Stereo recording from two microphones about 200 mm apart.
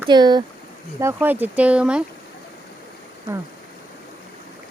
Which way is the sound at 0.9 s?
10° right (ahead or behind).